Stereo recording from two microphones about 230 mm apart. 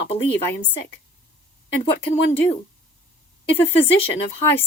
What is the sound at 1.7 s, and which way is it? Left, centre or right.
Speech, left.